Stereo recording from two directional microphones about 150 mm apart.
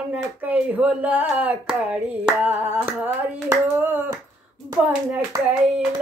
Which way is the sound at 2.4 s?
15° right (ahead or behind).